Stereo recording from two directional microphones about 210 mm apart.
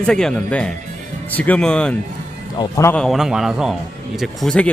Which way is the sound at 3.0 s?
Centre (ahead or behind).